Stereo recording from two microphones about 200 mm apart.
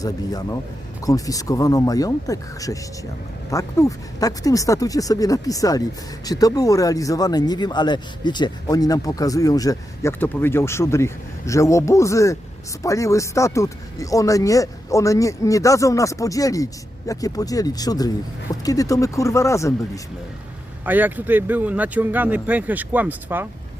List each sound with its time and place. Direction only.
0.0 s speech: 20° left (ahead or behind)
20.8 s speech: 10° right (ahead or behind)